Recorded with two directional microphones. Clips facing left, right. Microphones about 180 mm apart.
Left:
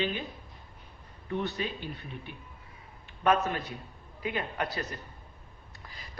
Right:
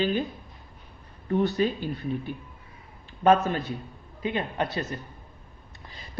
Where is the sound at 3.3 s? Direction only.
30° right (ahead or behind).